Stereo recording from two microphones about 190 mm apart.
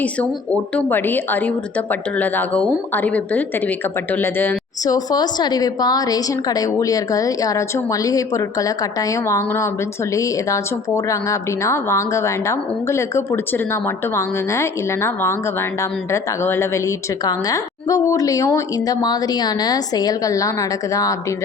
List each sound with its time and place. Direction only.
0.0 s a woman's voice: 5° left (ahead or behind)